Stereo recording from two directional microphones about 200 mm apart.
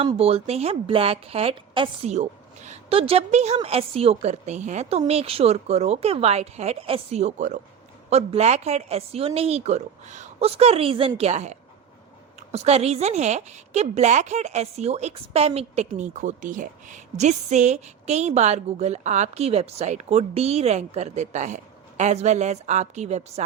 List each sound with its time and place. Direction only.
0.0 s a woman's voice: 30° right (ahead or behind)